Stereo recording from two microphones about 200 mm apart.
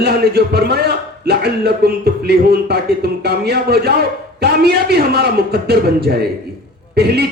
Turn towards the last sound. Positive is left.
turn(degrees=-55)  # may be behind; listen again after turning